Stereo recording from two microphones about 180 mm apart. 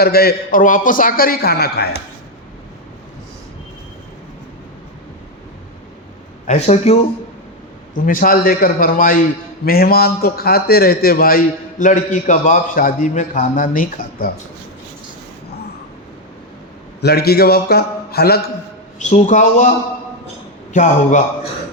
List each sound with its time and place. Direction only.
0.0 s a man's voice: 60° left (ahead or behind)
6.5 s speech: 35° left (ahead or behind)
7.9 s a man's voice: 50° left (ahead or behind)
17.0 s a man's voice: 60° left (ahead or behind)
18.9 s a man's voice: 45° left (ahead or behind)
20.7 s a man's voice: 45° left (ahead or behind)